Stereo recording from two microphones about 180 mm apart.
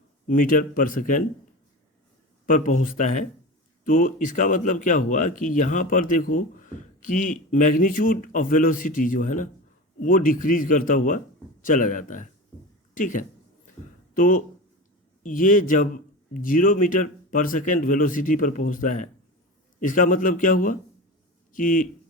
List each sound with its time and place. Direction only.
0.3 s speech: 50° left (ahead or behind)
2.5 s speech: 45° left (ahead or behind)